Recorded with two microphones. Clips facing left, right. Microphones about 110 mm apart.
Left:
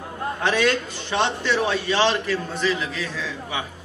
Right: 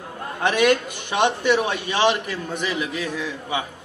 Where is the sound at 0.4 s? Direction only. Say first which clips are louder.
Right 3 dB; 15° right (ahead or behind).